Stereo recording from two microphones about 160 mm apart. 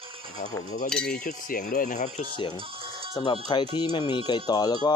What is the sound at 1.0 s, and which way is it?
Speech, 65° left (ahead or behind).